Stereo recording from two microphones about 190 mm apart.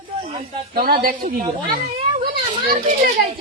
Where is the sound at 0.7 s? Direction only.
50° right (ahead or behind).